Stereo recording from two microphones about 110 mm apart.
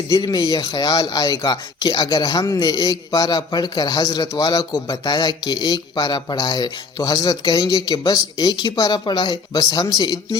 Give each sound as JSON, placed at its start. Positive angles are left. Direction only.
{"t": 0.1, "sound": "speech", "side_deg": 40}